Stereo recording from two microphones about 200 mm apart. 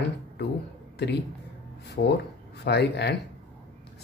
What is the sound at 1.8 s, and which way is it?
Speech, 55° left (ahead or behind).